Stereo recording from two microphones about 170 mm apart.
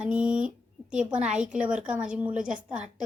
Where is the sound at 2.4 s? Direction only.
50° right (ahead or behind).